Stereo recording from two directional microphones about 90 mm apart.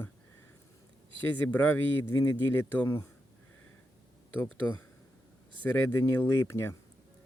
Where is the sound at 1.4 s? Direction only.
20° left (ahead or behind).